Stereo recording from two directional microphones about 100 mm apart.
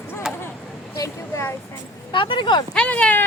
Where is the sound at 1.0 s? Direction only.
25° left (ahead or behind).